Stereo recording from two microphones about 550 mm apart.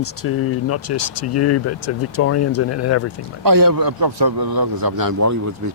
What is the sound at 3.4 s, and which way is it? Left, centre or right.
A man's voice, right.